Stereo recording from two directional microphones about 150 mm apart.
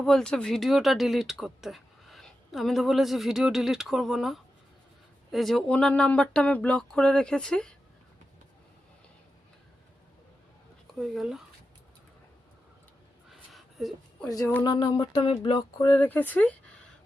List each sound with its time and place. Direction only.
0.0 s speech: 5° left (ahead or behind)
10.9 s speech: centre (ahead or behind)
13.3 s a sound: centre (ahead or behind)
14.3 s speech: 25° left (ahead or behind)
15.8 s speech: 15° left (ahead or behind)